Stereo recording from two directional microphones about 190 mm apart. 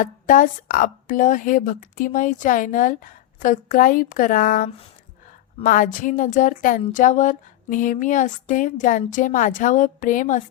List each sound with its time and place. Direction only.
0.0 s speech: 45° left (ahead or behind)